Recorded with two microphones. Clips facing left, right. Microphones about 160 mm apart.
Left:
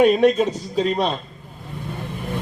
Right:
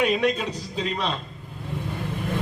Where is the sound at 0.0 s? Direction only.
40° left (ahead or behind).